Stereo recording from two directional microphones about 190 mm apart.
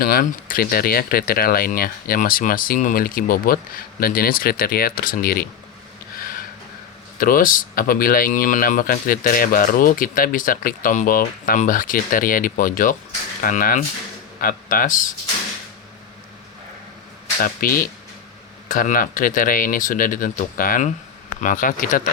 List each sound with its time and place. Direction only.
0.0 s speech: 50° left (ahead or behind)
6.1 s a sound: 50° left (ahead or behind)
7.2 s speech: 50° left (ahead or behind)
17.4 s speech: 50° left (ahead or behind)